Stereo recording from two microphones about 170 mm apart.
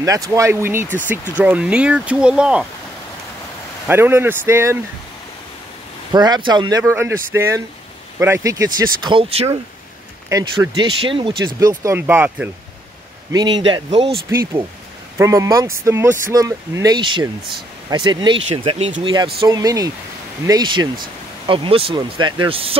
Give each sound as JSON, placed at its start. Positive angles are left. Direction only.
{"t": 0.0, "sound": "speech", "side_deg": -20}
{"t": 3.8, "sound": "speech", "side_deg": -15}
{"t": 6.1, "sound": "speech", "side_deg": -25}
{"t": 6.8, "sound": "speech", "side_deg": -15}
{"t": 10.3, "sound": "speech", "side_deg": -20}
{"t": 13.3, "sound": "speech", "side_deg": -25}
{"t": 15.1, "sound": "speech", "side_deg": -20}